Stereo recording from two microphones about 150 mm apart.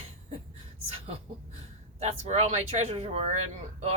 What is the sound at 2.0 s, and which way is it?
Speech, 50° right (ahead or behind).